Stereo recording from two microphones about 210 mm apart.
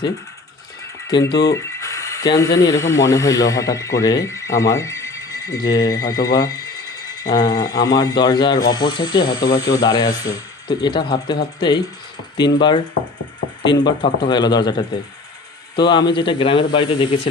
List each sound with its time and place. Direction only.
1.1 s speech: 20° left (ahead or behind)
12.4 s speech: 20° left (ahead or behind)